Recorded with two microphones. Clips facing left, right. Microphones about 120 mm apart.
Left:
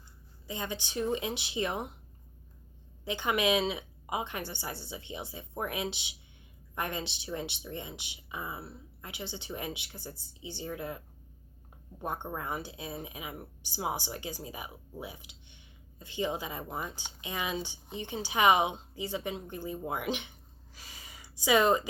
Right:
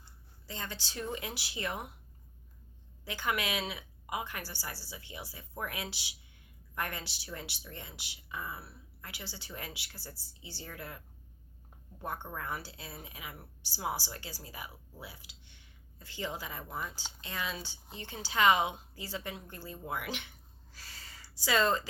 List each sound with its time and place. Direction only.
0.4 s a woman's voice: 15° left (ahead or behind)
3.0 s a woman's voice: 20° left (ahead or behind)
20.7 s a sound: 15° left (ahead or behind)